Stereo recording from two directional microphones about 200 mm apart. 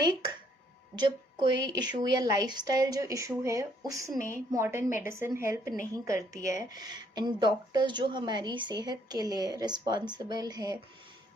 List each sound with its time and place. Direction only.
0.0 s a woman's voice: 20° right (ahead or behind)